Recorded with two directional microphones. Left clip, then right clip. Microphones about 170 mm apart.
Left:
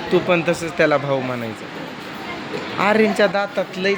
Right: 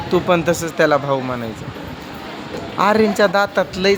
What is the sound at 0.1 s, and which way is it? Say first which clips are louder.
Speech: right 1 dB; 15° right (ahead or behind).